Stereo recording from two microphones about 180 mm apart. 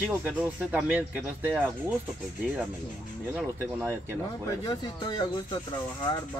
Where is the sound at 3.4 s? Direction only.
10° right (ahead or behind).